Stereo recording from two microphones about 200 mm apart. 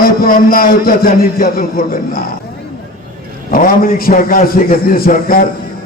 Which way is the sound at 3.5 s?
45° left (ahead or behind).